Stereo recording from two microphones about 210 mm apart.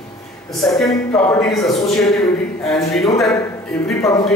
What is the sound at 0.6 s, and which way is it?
A man's voice, centre (ahead or behind).